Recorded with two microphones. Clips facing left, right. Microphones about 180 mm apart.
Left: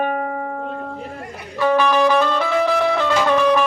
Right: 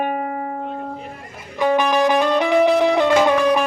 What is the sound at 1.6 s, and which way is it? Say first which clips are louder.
Music: left 1 dB; 15° right (ahead or behind).